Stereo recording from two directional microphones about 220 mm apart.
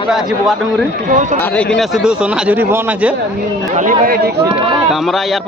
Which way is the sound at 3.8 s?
40° right (ahead or behind).